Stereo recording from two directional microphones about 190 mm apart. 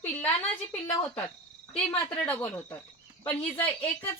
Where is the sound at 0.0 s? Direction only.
10° left (ahead or behind).